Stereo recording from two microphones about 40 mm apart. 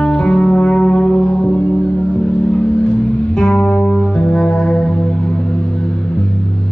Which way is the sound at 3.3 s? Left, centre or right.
Centre.